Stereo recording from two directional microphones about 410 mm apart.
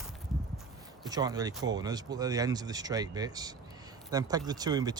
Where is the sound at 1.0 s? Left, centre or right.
Centre.